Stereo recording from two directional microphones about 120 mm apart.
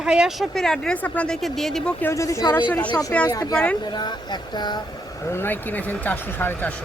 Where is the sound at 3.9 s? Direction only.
35° left (ahead or behind).